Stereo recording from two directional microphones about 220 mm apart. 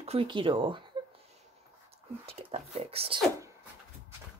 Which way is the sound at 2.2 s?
25° right (ahead or behind).